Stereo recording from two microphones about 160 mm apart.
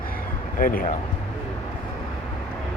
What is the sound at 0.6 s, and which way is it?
Speech, 60° left (ahead or behind).